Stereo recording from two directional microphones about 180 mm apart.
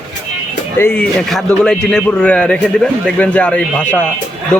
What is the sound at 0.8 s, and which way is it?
Speech, 10° left (ahead or behind).